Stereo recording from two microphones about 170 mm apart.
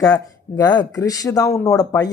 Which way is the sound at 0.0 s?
20° left (ahead or behind).